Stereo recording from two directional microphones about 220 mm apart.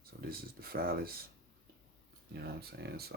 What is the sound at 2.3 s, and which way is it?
Speech, 45° right (ahead or behind).